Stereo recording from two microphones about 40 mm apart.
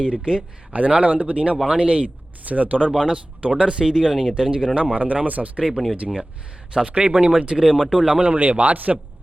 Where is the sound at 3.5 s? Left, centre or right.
Right.